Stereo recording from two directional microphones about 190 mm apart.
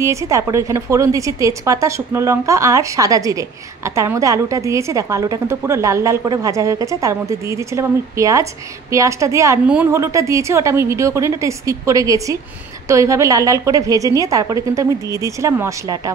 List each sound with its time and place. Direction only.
0.0 s a woman's voice: 15° right (ahead or behind)